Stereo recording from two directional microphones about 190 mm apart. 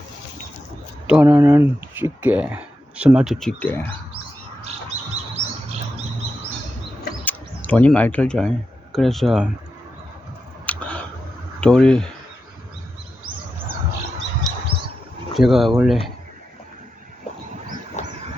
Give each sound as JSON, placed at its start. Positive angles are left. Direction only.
{"t": 1.0, "sound": "speech", "side_deg": -10}
{"t": 5.4, "sound": "bird", "side_deg": -35}
{"t": 7.3, "sound": "speech", "side_deg": 10}
{"t": 10.7, "sound": "a sound", "side_deg": 10}
{"t": 11.6, "sound": "speech", "side_deg": 5}
{"t": 15.4, "sound": "speech", "side_deg": 0}
{"t": 18.0, "sound": "vehicle", "side_deg": 40}